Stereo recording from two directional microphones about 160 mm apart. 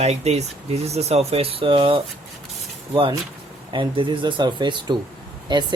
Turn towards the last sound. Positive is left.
turn(degrees=-30)  # may be behind; listen again after turning